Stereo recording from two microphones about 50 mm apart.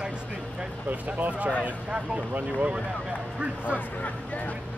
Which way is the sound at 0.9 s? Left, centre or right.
Right.